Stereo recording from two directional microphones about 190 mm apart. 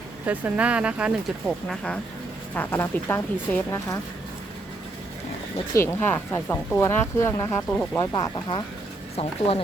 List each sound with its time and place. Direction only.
0.3 s speech: 10° right (ahead or behind); by 3.9 s 15° left (ahead or behind)
5.7 s speech: 15° left (ahead or behind)
8.1 s speech: 25° left (ahead or behind)